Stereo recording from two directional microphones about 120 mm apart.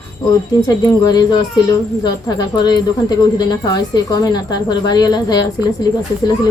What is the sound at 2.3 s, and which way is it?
A woman's voice, 35° left (ahead or behind).